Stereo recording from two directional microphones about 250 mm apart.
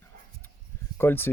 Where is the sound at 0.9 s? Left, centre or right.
Centre.